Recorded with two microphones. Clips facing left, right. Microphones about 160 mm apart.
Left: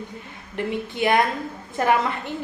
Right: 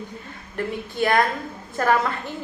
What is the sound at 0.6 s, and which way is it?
A woman's voice, 20° left (ahead or behind).